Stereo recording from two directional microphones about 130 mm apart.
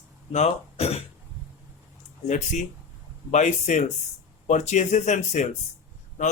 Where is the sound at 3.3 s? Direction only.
70° left (ahead or behind).